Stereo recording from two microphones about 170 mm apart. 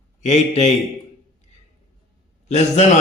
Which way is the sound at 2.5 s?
40° left (ahead or behind).